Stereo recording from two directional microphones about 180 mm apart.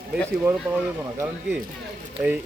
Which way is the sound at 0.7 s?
15° right (ahead or behind).